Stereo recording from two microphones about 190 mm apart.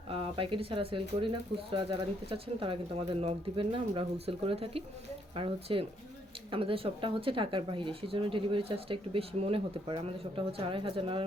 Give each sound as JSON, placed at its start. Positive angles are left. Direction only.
{"t": 0.1, "sound": "speech", "side_deg": -30}